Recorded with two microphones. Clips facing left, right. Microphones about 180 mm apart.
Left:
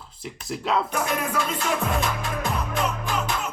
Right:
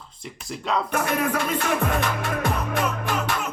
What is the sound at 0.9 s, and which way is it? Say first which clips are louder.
Music: right 2 dB; 60° right (ahead or behind).